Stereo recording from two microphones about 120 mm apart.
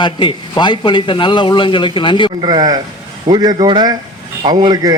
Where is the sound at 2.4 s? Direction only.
35° right (ahead or behind).